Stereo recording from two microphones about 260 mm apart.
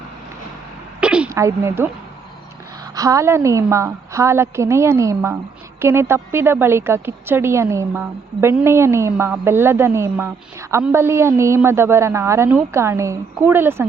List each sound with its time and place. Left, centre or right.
1.0 s a woman's voice: centre
2.9 s a woman's voice: centre